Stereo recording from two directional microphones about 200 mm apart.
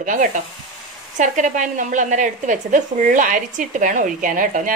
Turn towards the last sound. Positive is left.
turn(degrees=-40)  # may be behind; listen again after turning